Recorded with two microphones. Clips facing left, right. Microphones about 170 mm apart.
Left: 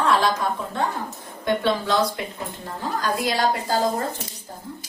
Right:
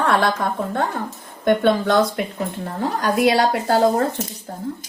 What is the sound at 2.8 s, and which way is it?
A woman's voice, 65° right (ahead or behind).